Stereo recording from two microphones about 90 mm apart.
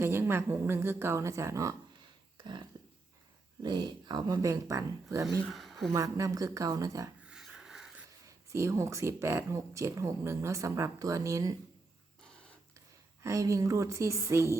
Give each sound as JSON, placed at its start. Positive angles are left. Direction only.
{"t": 0.0, "sound": "a woman's voice", "side_deg": -30}
{"t": 2.4, "sound": "a sound", "side_deg": -50}
{"t": 3.6, "sound": "speech", "side_deg": -50}
{"t": 4.4, "sound": "speech", "side_deg": -40}
{"t": 5.5, "sound": "speech", "side_deg": 0}
{"t": 5.9, "sound": "speech", "side_deg": -40}
{"t": 7.2, "sound": "rub", "side_deg": -10}
{"t": 8.3, "sound": "speech", "side_deg": -35}
{"t": 12.2, "sound": "a sound", "side_deg": 10}
{"t": 13.2, "sound": "speech", "side_deg": -35}